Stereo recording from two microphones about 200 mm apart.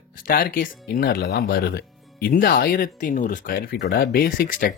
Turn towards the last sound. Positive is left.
turn(degrees=45)  # may be behind; listen again after turning